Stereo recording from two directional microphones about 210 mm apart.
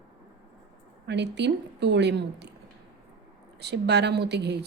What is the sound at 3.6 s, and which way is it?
A woman's voice, 50° right (ahead or behind).